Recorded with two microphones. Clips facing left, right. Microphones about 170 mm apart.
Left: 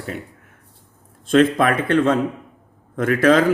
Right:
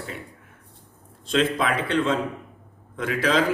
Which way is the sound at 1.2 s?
50° left (ahead or behind).